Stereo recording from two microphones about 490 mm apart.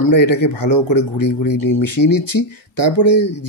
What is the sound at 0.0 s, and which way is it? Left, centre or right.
Speech, left.